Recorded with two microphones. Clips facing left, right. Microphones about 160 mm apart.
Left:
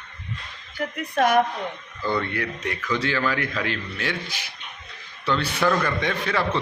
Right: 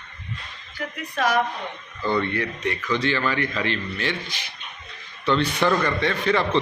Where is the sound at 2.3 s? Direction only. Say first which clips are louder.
Right 2 dB; 5° left (ahead or behind).